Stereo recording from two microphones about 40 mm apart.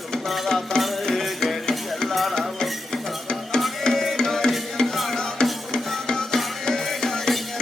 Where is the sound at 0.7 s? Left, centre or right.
Centre.